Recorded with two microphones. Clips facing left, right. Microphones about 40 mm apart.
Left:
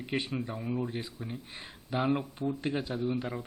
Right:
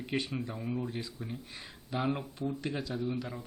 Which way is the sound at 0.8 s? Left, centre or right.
Left.